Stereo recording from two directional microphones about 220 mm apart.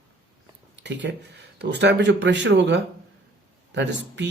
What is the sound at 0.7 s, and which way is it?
Speech, 50° right (ahead or behind).